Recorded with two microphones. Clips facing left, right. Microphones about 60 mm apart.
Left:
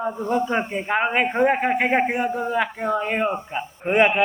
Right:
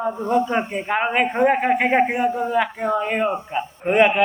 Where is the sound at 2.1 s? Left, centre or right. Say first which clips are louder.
Right 2 dB; centre.